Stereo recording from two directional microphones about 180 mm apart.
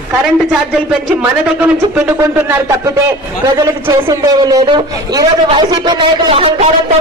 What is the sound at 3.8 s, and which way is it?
A man's voice, 15° right (ahead or behind).